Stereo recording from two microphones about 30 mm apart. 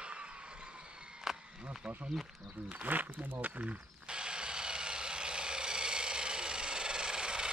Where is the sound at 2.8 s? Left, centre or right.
Right.